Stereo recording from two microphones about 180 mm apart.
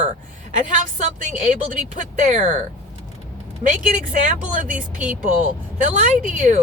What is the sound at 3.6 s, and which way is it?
Speech, 45° right (ahead or behind).